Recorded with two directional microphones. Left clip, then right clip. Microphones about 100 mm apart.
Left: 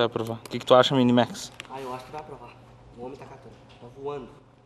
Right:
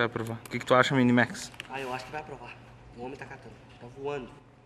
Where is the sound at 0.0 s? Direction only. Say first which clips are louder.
Left 4 dB; 20° left (ahead or behind).